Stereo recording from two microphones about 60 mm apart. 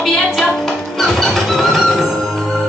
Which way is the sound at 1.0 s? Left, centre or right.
Centre.